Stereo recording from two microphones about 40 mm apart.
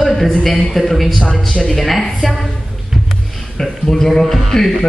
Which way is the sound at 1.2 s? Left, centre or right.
Left.